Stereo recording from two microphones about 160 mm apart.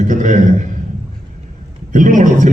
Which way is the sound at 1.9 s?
55° right (ahead or behind).